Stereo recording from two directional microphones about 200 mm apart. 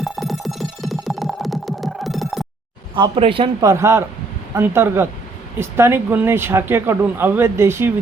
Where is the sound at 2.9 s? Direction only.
25° right (ahead or behind).